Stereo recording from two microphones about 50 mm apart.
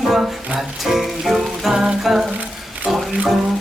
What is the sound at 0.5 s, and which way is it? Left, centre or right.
Music, centre.